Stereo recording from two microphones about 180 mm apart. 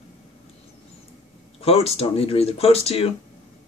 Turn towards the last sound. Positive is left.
turn(degrees=35)  # may be behind; listen again after turning